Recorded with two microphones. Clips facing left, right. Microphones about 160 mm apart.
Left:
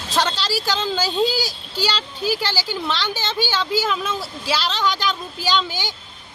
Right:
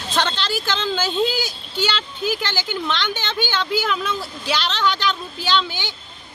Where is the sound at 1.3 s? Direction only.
40° left (ahead or behind).